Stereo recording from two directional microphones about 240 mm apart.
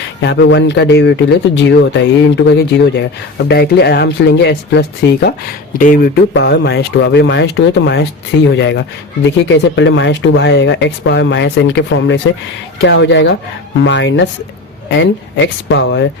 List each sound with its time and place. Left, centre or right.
0.2 s speech: left
6.3 s speech: left